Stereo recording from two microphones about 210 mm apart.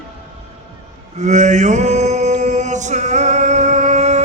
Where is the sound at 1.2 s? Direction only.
35° right (ahead or behind).